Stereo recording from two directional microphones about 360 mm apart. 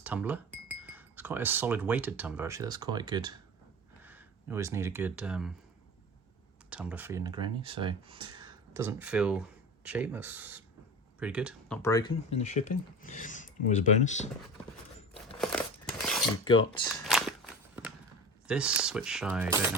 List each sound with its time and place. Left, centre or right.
0.0 s speech: centre
6.7 s speech: centre
11.8 s speech: centre
13.0 s speech: left
15.4 s cutlery: centre
16.5 s speech: centre
17.1 s a sound: centre
18.4 s speech: centre